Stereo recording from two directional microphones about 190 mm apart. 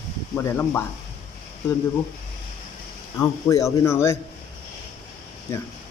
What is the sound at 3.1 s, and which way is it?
Speech, 15° left (ahead or behind).